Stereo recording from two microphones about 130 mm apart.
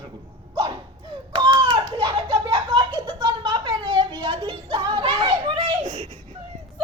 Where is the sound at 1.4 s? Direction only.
35° right (ahead or behind).